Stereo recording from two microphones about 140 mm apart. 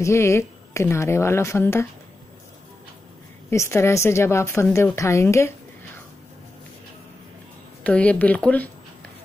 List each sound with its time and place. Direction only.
0.0 s speech: 20° left (ahead or behind)
3.4 s speech: 20° left (ahead or behind)
7.8 s a woman's voice: 10° left (ahead or behind)